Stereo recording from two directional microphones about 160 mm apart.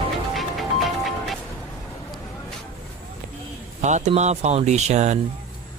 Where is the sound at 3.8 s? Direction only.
45° right (ahead or behind).